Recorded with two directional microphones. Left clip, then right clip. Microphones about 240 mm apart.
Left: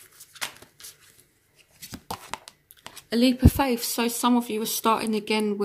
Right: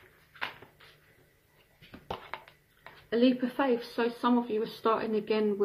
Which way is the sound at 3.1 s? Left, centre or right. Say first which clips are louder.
Left 4 dB; left.